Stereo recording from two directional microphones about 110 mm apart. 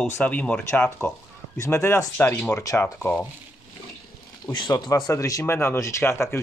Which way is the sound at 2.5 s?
30° left (ahead or behind).